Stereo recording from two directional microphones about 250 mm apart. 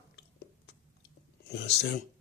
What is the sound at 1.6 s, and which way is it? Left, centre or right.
Speech, left.